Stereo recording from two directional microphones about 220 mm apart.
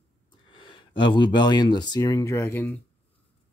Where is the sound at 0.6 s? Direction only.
20° left (ahead or behind).